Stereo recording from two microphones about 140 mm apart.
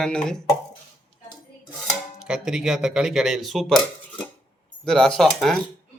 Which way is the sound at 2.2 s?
5° right (ahead or behind).